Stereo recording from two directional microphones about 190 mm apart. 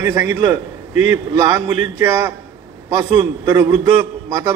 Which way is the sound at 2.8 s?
20° right (ahead or behind).